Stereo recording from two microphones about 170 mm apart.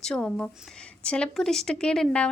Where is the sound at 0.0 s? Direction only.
5° left (ahead or behind).